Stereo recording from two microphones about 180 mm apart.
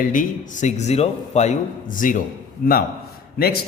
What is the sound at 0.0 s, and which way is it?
Speech, 50° left (ahead or behind).